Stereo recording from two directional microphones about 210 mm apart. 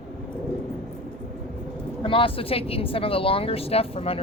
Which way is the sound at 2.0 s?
25° left (ahead or behind).